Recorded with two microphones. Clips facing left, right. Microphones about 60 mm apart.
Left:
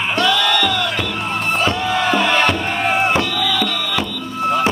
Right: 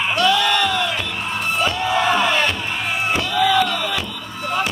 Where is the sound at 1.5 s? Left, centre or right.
Left.